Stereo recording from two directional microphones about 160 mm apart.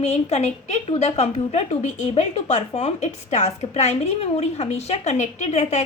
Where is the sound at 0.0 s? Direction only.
45° left (ahead or behind).